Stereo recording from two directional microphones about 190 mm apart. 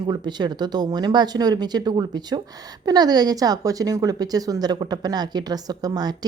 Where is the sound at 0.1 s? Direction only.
20° right (ahead or behind).